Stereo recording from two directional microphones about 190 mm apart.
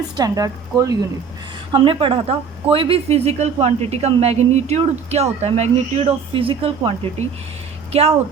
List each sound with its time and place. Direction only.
0.2 s speech: 20° right (ahead or behind)